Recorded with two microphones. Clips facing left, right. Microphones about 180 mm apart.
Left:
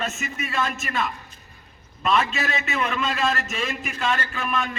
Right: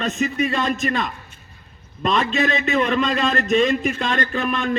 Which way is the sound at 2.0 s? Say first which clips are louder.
Right 3 dB; 35° right (ahead or behind).